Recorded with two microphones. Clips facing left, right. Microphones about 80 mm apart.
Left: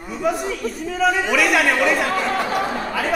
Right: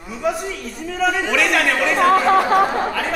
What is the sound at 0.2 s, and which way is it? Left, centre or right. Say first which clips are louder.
A woman's voice: left 1 dB; centre.